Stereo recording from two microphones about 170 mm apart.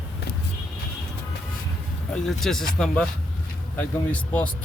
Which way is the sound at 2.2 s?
Centre (ahead or behind).